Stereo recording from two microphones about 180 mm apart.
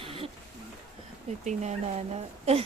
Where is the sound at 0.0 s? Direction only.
30° right (ahead or behind).